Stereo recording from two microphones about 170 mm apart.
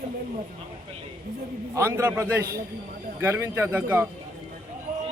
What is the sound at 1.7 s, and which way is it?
A man's voice, 15° right (ahead or behind).